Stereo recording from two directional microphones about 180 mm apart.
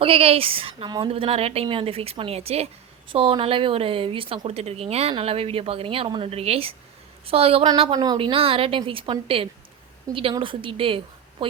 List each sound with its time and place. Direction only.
0.0 s a woman's voice: 30° right (ahead or behind)